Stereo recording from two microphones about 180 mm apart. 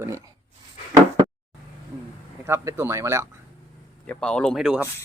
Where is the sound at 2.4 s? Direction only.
15° right (ahead or behind).